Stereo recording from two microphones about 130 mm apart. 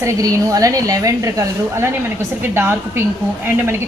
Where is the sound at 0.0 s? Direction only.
25° right (ahead or behind).